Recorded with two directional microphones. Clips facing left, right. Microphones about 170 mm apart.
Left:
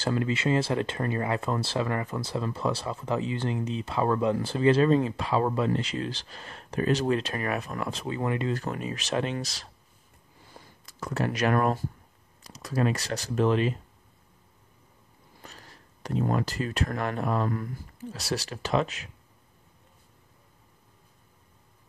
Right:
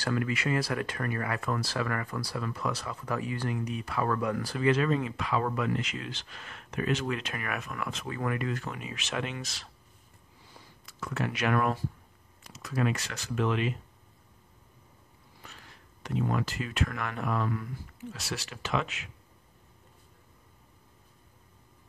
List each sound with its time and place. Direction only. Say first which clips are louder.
0.0 s speech: left 3 dB; 25° left (ahead or behind)
8.6 s speech: left 6 dB; 40° left (ahead or behind)
10.5 s a sound: left 3 dB; 40° left (ahead or behind)
12.4 s speech: left 3 dB; 35° left (ahead or behind)
15.4 s speech: left 3 dB; 40° left (ahead or behind)